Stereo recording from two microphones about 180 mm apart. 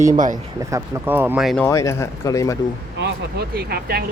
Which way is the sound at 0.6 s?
15° right (ahead or behind).